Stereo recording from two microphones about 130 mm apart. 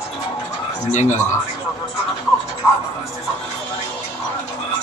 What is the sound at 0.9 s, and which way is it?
Speech, 65° left (ahead or behind).